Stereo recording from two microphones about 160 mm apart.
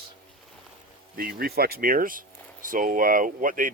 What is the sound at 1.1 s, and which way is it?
Speech, 70° right (ahead or behind).